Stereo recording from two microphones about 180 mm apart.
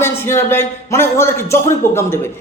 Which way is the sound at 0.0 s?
15° left (ahead or behind).